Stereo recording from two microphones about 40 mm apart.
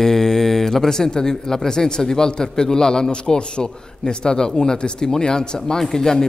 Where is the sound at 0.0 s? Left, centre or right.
Centre.